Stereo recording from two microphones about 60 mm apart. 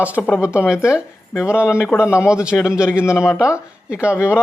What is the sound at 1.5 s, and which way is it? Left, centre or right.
Speech, left.